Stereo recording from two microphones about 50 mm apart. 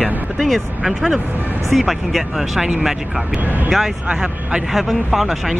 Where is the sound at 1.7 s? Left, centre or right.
Centre.